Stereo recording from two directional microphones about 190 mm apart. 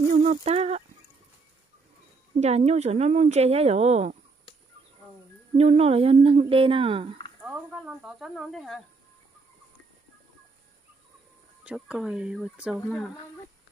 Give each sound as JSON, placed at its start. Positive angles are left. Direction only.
{"t": 0.1, "sound": "speech", "side_deg": -35}
{"t": 2.4, "sound": "speech", "side_deg": -35}
{"t": 5.6, "sound": "speech", "side_deg": -30}
{"t": 7.4, "sound": "fowl", "side_deg": -5}
{"t": 11.6, "sound": "fowl", "side_deg": -5}